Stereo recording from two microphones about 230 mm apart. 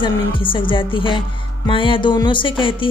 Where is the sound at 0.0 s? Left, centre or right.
Left.